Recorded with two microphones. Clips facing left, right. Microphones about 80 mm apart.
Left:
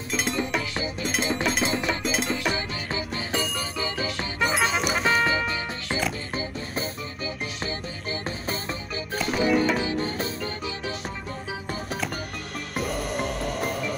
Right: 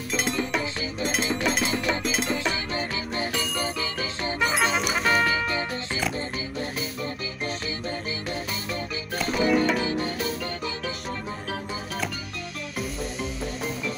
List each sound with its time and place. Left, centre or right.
0.1 s music: centre
1.0 s a sound: centre
1.9 s music: centre
3.8 s music: left
4.4 s music: centre
5.2 s music: left
9.1 s music: centre
9.9 s music: left
12.7 s music: left